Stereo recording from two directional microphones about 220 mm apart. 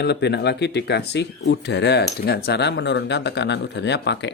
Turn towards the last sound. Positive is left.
turn(degrees=50)  # may be behind; listen again after turning